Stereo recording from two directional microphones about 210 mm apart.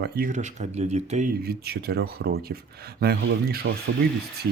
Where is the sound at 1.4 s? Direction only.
50° right (ahead or behind).